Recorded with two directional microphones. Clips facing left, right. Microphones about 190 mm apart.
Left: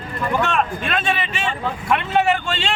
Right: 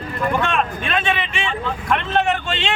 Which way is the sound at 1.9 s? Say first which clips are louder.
Left 1 dB; 10° left (ahead or behind).